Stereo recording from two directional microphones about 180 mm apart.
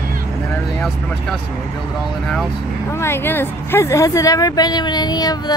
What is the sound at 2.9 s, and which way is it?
Speech, 15° left (ahead or behind).